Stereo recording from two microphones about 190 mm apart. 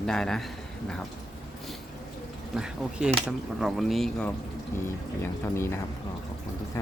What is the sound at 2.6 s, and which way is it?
Speech, 5° right (ahead or behind).